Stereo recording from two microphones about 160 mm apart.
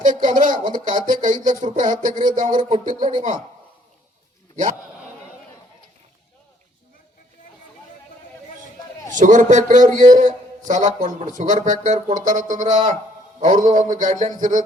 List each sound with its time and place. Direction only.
0.0 s speech: 55° right (ahead or behind)
3.0 s a man's voice: 30° right (ahead or behind)
9.1 s a man's voice: 55° right (ahead or behind)